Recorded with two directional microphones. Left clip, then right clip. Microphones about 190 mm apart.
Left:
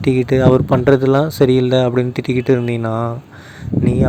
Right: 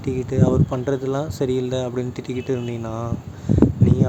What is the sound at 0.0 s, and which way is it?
Speech, 45° left (ahead or behind).